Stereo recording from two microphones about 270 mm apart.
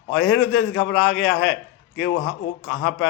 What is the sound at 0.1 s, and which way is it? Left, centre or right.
A man's voice, left.